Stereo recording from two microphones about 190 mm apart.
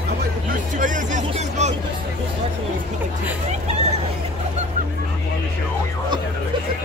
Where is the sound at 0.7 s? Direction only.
45° right (ahead or behind).